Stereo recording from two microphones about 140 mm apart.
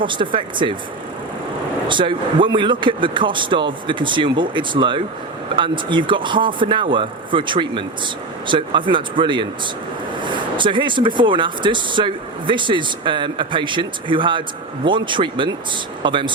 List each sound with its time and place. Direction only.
0.0 s speech: 35° right (ahead or behind)
1.9 s speech: 35° right (ahead or behind)